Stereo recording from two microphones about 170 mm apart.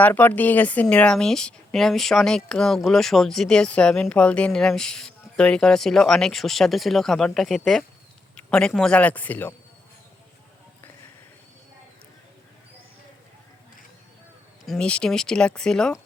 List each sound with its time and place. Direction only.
0.0 s a woman's voice: 10° left (ahead or behind)
14.7 s a woman's voice: 5° left (ahead or behind)